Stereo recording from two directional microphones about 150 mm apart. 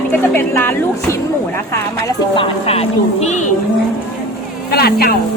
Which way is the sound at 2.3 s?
35° left (ahead or behind).